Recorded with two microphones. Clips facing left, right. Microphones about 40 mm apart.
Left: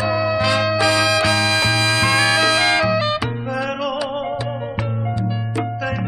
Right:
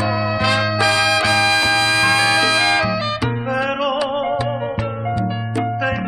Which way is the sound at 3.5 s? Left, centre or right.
Right.